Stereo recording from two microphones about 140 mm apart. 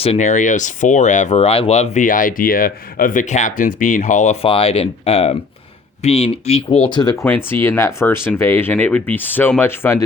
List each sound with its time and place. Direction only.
0.0 s speech: 50° left (ahead or behind)
4.4 s speech: 40° left (ahead or behind)
6.9 s speech: 30° left (ahead or behind)
7.3 s speech: 15° left (ahead or behind)